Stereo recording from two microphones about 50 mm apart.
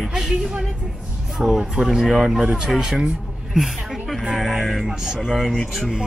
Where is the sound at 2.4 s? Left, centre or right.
Centre.